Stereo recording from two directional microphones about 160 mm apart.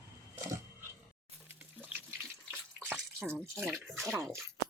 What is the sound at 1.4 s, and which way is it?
Water, 10° right (ahead or behind).